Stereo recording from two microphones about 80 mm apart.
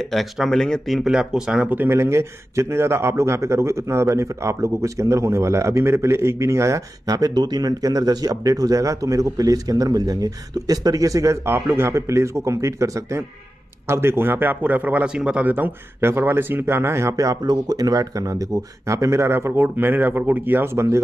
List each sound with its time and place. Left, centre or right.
0.0 s speech: centre
1.9 s speech: right
13.8 s a man's voice: right